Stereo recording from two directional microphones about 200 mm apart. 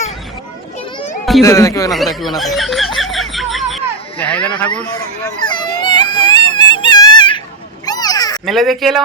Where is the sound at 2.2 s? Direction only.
Centre (ahead or behind).